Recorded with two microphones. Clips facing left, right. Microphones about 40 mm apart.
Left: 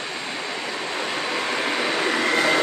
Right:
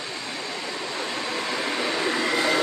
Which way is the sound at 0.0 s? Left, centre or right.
Left.